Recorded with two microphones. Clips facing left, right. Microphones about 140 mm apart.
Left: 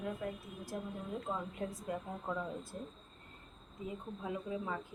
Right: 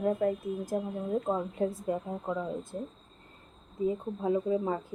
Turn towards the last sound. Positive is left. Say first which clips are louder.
# right 11 dB
turn(degrees=-35)  # may be behind; listen again after turning